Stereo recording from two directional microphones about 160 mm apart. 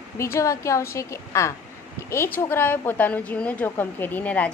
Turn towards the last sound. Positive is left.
turn(degrees=10)  # may be behind; listen again after turning